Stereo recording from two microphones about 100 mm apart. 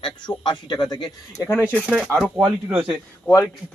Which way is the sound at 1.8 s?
10° left (ahead or behind).